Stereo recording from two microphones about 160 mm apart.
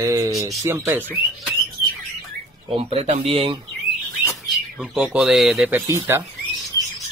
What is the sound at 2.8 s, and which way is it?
Speech, 35° right (ahead or behind).